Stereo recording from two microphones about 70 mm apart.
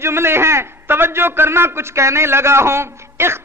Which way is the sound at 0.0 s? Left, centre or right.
Right.